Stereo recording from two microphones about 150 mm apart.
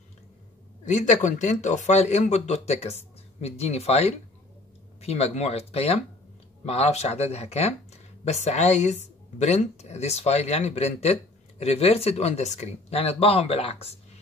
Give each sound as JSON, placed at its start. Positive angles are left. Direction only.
{"t": 0.8, "sound": "speech", "side_deg": 55}